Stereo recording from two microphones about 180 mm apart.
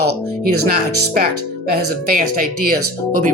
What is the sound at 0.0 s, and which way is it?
Speech, 55° right (ahead or behind).